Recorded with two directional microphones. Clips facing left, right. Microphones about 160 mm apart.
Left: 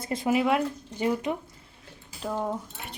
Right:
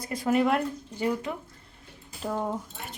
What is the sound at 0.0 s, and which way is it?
Speech, 25° left (ahead or behind).